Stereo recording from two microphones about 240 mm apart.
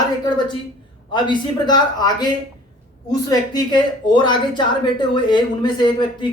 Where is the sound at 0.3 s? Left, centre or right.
Centre.